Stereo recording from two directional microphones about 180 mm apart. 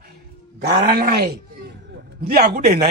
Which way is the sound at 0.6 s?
60° right (ahead or behind).